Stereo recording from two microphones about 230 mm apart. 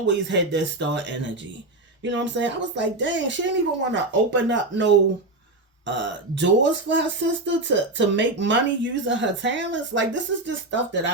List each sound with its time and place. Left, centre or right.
0.0 s speech: right